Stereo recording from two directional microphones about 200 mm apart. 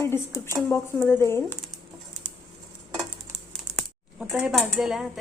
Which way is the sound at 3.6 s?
Centre (ahead or behind).